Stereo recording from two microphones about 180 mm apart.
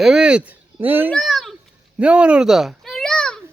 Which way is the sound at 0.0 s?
5° right (ahead or behind).